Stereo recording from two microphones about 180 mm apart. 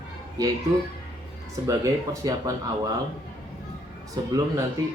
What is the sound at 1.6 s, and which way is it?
Speech, 20° right (ahead or behind).